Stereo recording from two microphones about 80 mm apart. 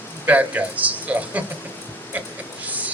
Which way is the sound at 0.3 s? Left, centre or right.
Centre.